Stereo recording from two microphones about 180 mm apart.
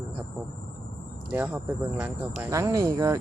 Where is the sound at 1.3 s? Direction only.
10° right (ahead or behind).